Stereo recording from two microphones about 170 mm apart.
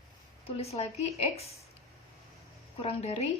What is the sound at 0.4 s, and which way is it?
Speech, 35° left (ahead or behind).